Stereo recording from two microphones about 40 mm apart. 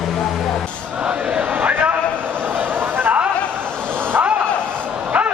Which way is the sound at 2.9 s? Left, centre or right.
Right.